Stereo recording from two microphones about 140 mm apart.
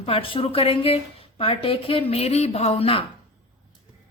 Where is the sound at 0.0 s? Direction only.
40° left (ahead or behind).